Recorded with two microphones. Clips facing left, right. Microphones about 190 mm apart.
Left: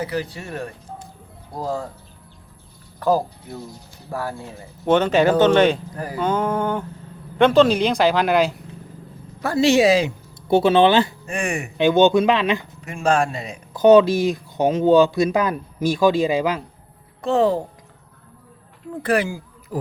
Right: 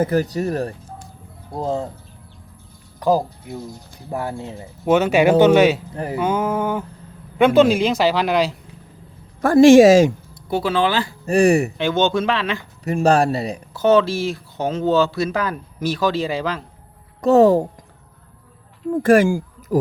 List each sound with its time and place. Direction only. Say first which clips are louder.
0.0 s speech: right 7 dB; 45° right (ahead or behind)
1.5 s speech: right 3 dB; 25° right (ahead or behind)
3.0 s speech: right 1 dB; 15° right (ahead or behind)
4.9 s speech: right 2 dB; 10° right (ahead or behind)
5.9 s speech: right 4 dB; 25° right (ahead or behind)
6.1 s speech: right 1 dB; 10° right (ahead or behind)
9.4 s speech: right 8 dB; 50° right (ahead or behind)
10.5 s speech: left 5 dB; 25° left (ahead or behind)
11.3 s speech: right 11 dB; 35° right (ahead or behind)
11.8 s speech: left 4 dB; 15° left (ahead or behind)
12.8 s speech: right 5 dB; 35° right (ahead or behind)
13.7 s speech: left 4 dB; 15° left (ahead or behind)
17.2 s a woman's voice: right 6 dB; 40° right (ahead or behind)
19.0 s speech: right 7 dB; 45° right (ahead or behind)